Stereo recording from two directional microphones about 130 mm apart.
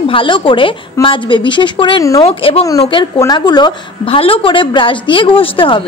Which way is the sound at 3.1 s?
30° left (ahead or behind).